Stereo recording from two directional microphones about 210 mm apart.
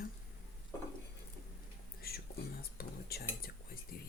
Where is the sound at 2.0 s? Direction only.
45° left (ahead or behind).